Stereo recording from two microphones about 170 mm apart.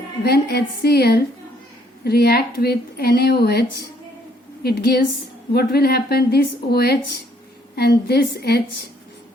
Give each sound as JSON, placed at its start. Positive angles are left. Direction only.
{"t": 0.2, "sound": "speech", "side_deg": 70}